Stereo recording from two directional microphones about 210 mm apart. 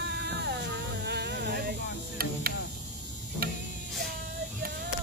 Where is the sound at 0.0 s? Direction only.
55° right (ahead or behind).